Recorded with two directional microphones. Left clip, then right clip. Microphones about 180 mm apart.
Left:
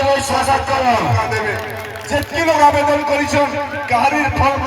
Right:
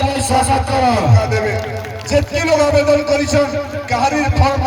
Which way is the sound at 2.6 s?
40° left (ahead or behind).